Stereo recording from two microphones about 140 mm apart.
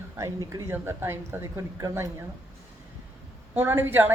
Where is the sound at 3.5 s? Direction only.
15° right (ahead or behind).